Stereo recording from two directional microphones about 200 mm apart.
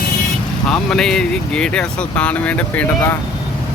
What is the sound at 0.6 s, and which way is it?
Speech, 5° left (ahead or behind).